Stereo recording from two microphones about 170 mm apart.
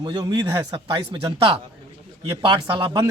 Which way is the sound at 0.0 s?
25° right (ahead or behind).